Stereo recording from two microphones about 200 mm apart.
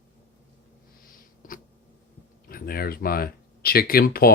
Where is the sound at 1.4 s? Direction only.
45° left (ahead or behind).